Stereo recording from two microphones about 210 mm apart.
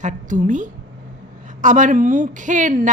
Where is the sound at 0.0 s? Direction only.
40° right (ahead or behind).